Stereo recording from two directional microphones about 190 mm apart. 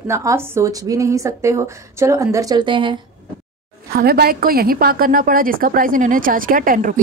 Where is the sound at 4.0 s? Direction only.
55° right (ahead or behind).